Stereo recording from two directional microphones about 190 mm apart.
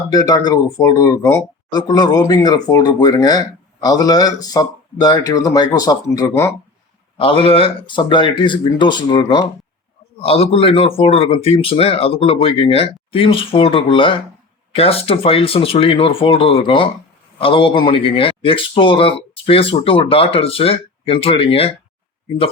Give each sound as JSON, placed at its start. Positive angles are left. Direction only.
{"t": 0.1, "sound": "a man's voice", "side_deg": 20}
{"t": 7.2, "sound": "a man's voice", "side_deg": 30}